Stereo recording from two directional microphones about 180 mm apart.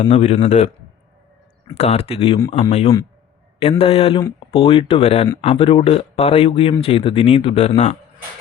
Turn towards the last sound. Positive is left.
turn(degrees=40)  # may be behind; listen again after turning